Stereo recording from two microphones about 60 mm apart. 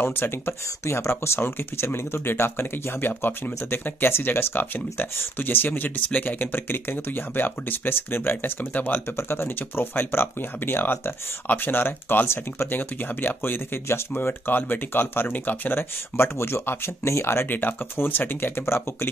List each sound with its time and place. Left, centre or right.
0.0 s speech: left
16.2 s speech: left
17.5 s speech: left